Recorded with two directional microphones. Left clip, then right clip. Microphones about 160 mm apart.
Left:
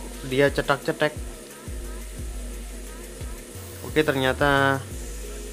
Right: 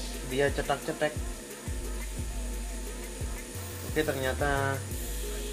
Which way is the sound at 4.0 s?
50° left (ahead or behind).